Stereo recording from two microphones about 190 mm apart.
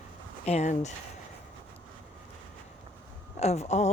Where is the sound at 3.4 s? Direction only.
35° left (ahead or behind).